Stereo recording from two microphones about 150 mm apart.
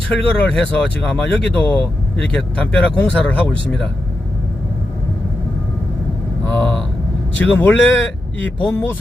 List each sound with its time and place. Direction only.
0.3 s speech: 10° left (ahead or behind)
6.4 s a sound: 10° left (ahead or behind)
7.3 s speech: 10° left (ahead or behind)